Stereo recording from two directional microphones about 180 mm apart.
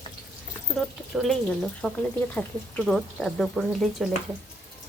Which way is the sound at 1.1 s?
Centre (ahead or behind).